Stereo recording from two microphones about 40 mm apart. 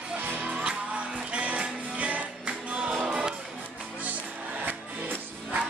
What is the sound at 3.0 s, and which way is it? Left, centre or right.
Music, right.